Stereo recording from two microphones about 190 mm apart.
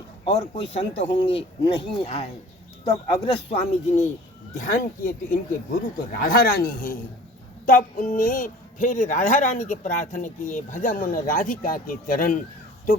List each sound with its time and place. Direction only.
0.3 s a man's voice: 35° left (ahead or behind)